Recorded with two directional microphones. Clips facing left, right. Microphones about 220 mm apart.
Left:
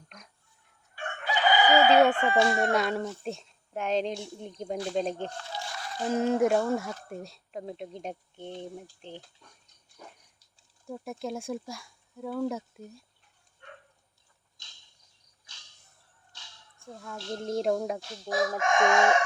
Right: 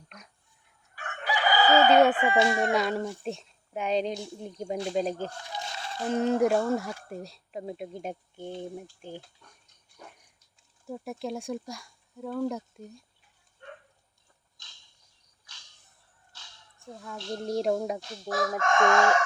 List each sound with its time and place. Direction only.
0.9 s chicken: 25° left (ahead or behind)
1.9 s speech: 5° right (ahead or behind)
2.3 s chicken: 10° right (ahead or behind)
2.6 s speech: centre (ahead or behind)
5.4 s goat: 20° right (ahead or behind)
6.1 s speech: centre (ahead or behind)
10.8 s speech: centre (ahead or behind)
16.8 s speech: centre (ahead or behind)
18.3 s chicken: 15° left (ahead or behind)